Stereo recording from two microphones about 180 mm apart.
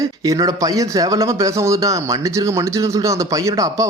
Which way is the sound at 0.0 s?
20° right (ahead or behind).